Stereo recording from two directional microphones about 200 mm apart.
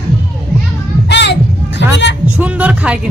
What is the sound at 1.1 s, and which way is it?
Music, 60° left (ahead or behind).